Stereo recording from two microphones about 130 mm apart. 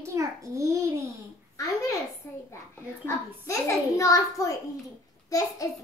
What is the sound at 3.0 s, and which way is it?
A child's voice, 20° left (ahead or behind).